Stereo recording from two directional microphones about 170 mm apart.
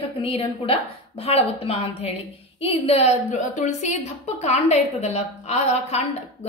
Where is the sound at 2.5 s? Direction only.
35° left (ahead or behind).